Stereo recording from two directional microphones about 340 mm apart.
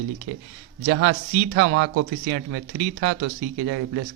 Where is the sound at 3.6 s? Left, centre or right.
Right.